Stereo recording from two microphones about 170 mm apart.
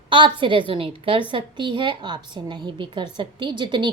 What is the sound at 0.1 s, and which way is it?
A woman's voice, 30° right (ahead or behind).